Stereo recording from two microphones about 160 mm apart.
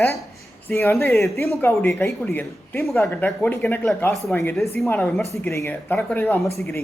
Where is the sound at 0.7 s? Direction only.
15° left (ahead or behind).